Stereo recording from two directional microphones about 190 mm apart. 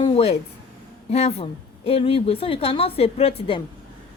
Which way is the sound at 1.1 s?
35° left (ahead or behind).